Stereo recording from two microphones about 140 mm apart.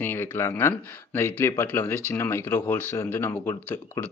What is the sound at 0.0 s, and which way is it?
Speech, 15° left (ahead or behind).